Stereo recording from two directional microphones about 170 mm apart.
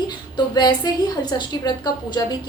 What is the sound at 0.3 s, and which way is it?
A woman's voice, 25° left (ahead or behind).